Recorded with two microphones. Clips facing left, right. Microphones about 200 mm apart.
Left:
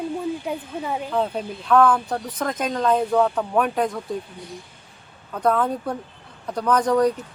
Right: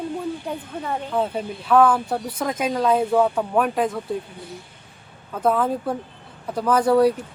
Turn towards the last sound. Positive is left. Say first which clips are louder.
# right 2 dB
turn(degrees=-10)  # may be behind; listen again after turning